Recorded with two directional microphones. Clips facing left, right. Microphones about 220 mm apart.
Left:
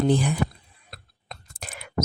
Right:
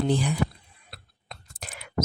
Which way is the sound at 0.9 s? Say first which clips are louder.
Left 2 dB; 50° left (ahead or behind).